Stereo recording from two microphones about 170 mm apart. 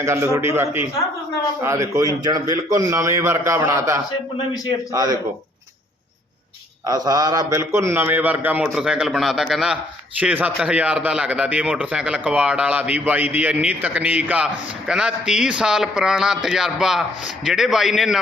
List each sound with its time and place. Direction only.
0.0 s a man's voice: 15° right (ahead or behind)
6.8 s a man's voice: 20° right (ahead or behind); by 18.2 s centre (ahead or behind)